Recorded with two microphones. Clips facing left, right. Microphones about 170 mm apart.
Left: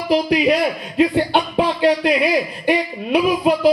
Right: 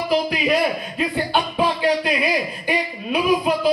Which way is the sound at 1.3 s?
75° left (ahead or behind).